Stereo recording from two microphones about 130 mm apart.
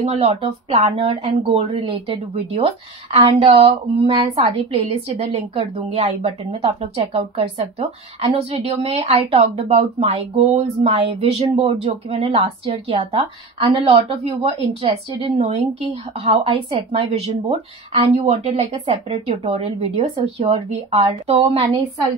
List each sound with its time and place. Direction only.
0.0 s speech: 50° right (ahead or behind)
1.5 s speech: 55° right (ahead or behind)